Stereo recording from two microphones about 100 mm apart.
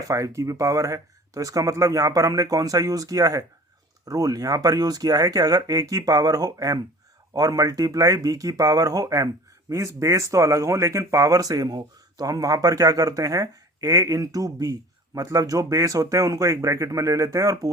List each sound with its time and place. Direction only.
0.1 s speech: 35° right (ahead or behind)